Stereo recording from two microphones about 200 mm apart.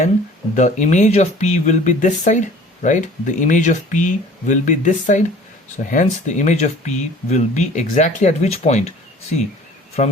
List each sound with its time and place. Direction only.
0.5 s speech: 35° left (ahead or behind)
10.0 s speech: 35° left (ahead or behind)